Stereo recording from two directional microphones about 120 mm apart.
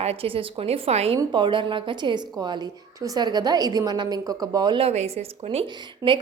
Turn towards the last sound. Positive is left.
turn(degrees=-40)  # may be behind; listen again after turning